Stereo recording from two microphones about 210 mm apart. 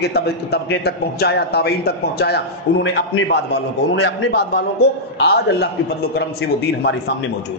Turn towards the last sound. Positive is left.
turn(degrees=50)  # may be behind; listen again after turning